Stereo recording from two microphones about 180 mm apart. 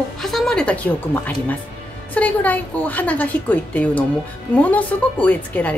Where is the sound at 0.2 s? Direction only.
Centre (ahead or behind).